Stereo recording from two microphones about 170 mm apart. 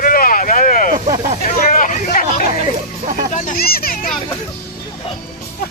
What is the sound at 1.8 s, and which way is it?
Hubbub, 50° left (ahead or behind).